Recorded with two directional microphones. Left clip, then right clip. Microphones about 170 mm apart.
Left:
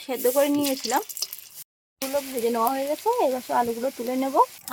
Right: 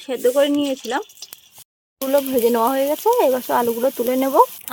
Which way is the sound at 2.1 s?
35° right (ahead or behind).